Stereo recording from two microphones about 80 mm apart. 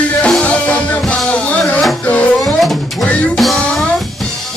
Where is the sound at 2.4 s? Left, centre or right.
Centre.